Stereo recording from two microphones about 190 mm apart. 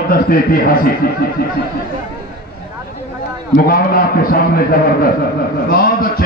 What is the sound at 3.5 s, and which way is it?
Speech, 50° left (ahead or behind).